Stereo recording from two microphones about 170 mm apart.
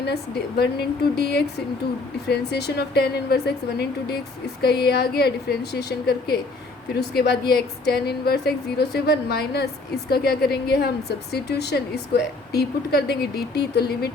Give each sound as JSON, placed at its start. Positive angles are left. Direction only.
{"t": 0.0, "sound": "a woman's voice", "side_deg": 75}